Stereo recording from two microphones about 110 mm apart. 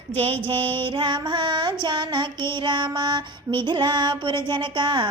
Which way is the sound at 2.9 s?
45° right (ahead or behind).